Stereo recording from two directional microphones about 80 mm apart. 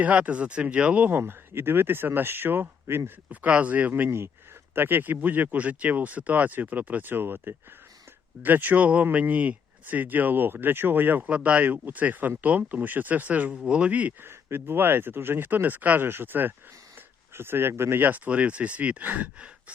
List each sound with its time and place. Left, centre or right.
0.0 s speech: centre
1.2 s speech: right
14.3 s speech: right